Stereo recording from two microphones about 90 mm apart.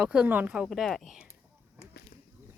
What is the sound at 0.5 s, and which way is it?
Speech, 5° right (ahead or behind).